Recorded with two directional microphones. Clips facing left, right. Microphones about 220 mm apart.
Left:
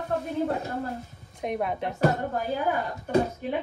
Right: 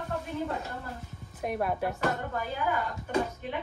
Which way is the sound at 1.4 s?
5° right (ahead or behind).